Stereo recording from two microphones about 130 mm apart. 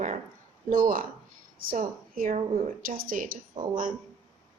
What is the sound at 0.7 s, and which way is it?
A woman's voice, 90° right.